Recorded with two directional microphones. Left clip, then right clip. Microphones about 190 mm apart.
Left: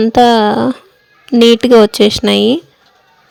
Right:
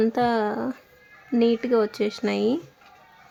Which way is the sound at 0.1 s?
40° left (ahead or behind).